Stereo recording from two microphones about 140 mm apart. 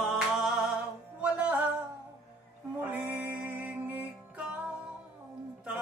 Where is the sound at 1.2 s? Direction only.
10° right (ahead or behind).